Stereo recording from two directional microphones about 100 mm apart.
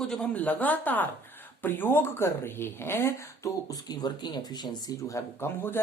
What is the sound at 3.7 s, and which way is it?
Speech, 45° left (ahead or behind).